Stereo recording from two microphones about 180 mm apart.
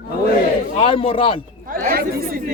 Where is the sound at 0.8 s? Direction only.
30° left (ahead or behind).